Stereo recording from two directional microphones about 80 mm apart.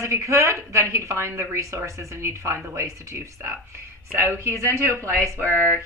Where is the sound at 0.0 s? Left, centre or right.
Right.